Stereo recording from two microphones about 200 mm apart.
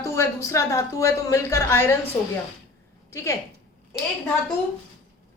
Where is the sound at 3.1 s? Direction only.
15° left (ahead or behind).